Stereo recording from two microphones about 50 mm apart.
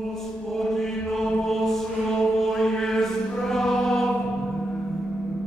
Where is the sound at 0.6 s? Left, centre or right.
Centre.